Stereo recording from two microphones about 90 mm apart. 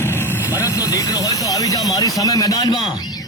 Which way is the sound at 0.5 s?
40° left (ahead or behind).